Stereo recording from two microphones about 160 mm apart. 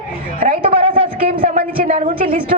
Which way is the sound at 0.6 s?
35° right (ahead or behind).